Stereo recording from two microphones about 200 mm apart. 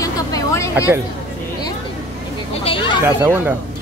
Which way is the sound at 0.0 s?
15° left (ahead or behind).